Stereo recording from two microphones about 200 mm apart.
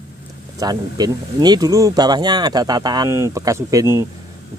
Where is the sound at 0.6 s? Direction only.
20° right (ahead or behind).